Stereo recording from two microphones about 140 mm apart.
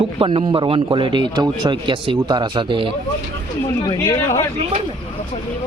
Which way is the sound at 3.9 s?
25° left (ahead or behind).